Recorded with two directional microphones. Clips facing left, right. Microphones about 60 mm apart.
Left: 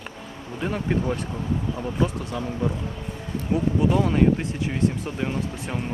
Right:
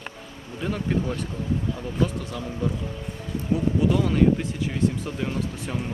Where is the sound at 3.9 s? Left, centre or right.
Centre.